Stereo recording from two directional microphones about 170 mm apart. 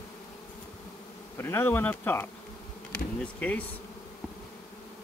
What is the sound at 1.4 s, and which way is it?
Speech, 15° left (ahead or behind).